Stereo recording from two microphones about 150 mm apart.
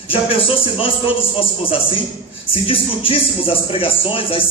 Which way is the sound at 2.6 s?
35° left (ahead or behind).